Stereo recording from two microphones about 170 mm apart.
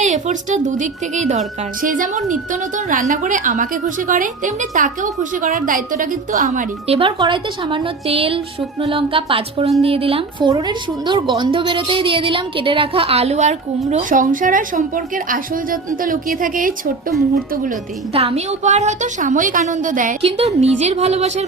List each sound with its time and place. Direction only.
0.0 s a woman's voice: 45° right (ahead or behind)
18.1 s a woman's voice: 35° right (ahead or behind)
20.2 s a woman's voice: 35° right (ahead or behind)